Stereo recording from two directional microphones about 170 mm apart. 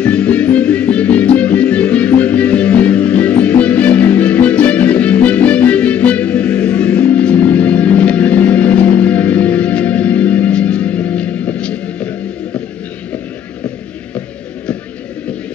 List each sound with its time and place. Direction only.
0.0 s music: 10° left (ahead or behind)